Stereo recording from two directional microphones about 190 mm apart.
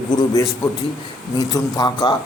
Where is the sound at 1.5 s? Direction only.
20° left (ahead or behind).